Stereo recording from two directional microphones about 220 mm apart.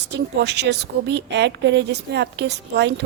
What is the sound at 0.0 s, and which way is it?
A woman's voice, 50° right (ahead or behind).